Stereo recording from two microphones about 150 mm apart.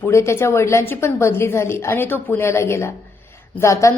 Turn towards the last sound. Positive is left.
turn(degrees=20)  # may be behind; listen again after turning